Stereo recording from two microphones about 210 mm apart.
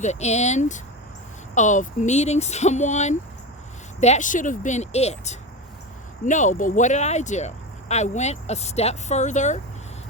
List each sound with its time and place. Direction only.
0.0 s speech: 35° left (ahead or behind)